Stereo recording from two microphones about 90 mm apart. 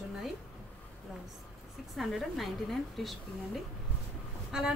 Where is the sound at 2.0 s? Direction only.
Centre (ahead or behind).